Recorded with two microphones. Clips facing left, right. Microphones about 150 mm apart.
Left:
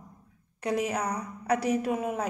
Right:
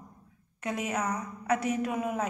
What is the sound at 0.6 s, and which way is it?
A man's voice, 35° left (ahead or behind).